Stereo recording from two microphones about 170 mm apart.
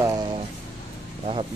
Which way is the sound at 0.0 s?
20° right (ahead or behind).